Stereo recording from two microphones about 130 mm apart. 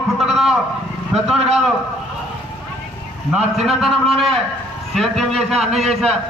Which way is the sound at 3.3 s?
5° right (ahead or behind).